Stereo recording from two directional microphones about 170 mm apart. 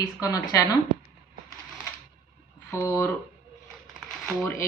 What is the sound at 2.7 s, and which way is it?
Speech, 15° left (ahead or behind).